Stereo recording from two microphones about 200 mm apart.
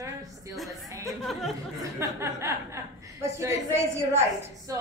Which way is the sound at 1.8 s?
15° right (ahead or behind).